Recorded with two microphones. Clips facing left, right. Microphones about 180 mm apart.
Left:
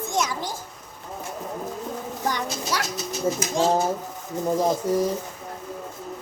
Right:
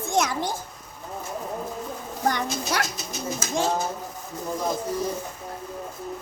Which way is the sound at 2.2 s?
55° right (ahead or behind).